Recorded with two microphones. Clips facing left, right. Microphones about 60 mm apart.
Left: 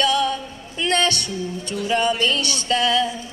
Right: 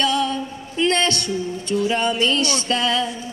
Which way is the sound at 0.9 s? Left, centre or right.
Right.